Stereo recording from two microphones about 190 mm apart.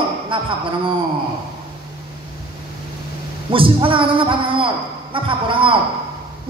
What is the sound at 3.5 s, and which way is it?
A man's voice, 30° right (ahead or behind).